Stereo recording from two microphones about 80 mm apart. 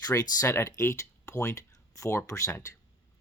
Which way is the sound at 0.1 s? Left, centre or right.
Left.